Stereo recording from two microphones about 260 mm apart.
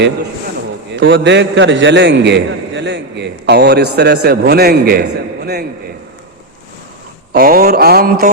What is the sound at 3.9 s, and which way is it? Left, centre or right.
Mantra, right.